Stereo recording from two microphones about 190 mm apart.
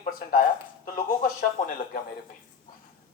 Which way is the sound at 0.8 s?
45° left (ahead or behind).